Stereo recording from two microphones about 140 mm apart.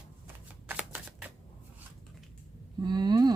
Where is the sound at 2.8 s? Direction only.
30° right (ahead or behind).